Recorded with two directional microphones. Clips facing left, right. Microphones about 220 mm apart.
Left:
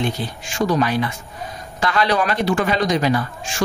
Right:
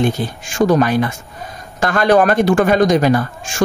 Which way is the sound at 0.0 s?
50° right (ahead or behind).